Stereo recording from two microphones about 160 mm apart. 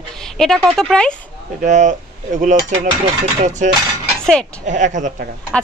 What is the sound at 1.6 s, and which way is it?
Dishes, 50° right (ahead or behind).